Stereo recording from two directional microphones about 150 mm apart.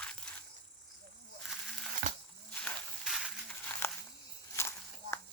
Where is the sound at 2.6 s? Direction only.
5° left (ahead or behind).